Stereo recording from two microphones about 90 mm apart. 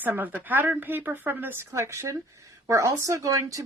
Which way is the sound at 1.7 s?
30° right (ahead or behind).